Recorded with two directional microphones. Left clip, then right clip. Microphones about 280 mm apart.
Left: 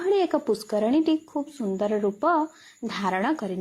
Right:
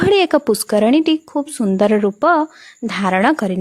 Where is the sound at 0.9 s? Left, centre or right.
Right.